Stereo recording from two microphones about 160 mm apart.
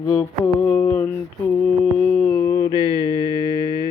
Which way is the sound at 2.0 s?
10° left (ahead or behind).